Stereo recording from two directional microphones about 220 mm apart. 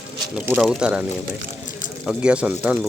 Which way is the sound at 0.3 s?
5° right (ahead or behind).